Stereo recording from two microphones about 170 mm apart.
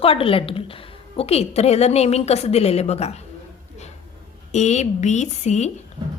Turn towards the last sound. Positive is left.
turn(degrees=40)  # may be behind; listen again after turning